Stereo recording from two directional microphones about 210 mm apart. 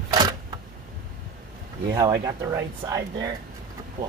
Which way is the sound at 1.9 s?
15° right (ahead or behind).